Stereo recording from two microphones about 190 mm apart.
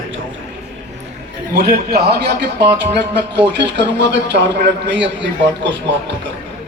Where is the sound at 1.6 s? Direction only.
55° right (ahead or behind).